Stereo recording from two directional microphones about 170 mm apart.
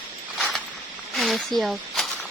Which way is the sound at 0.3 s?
Centre (ahead or behind).